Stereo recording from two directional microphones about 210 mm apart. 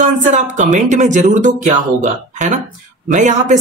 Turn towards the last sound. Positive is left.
turn(degrees=-35)  # may be behind; listen again after turning